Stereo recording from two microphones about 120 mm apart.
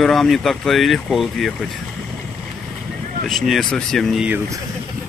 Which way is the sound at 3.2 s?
Centre (ahead or behind).